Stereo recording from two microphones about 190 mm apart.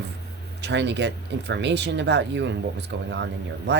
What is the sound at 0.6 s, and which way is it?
Speech, 65° right (ahead or behind).